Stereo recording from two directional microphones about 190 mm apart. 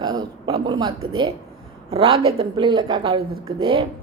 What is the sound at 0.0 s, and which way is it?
A woman's voice, 20° right (ahead or behind).